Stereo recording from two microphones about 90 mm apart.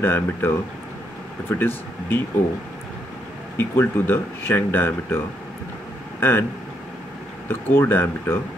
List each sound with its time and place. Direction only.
0.0 s speech: 25° left (ahead or behind)
3.5 s speech: 25° left (ahead or behind)
7.4 s speech: 25° left (ahead or behind)